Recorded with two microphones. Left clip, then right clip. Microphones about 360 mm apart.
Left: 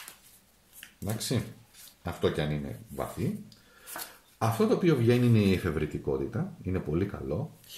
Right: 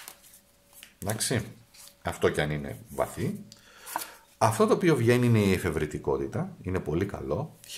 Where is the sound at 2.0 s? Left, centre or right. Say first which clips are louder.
Right 3 dB; right.